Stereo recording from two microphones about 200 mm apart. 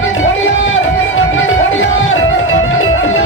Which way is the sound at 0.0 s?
80° left.